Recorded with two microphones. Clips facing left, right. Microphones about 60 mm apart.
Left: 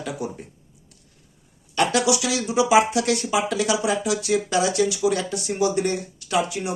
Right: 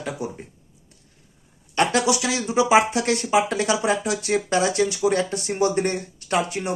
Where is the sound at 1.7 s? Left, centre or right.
Right.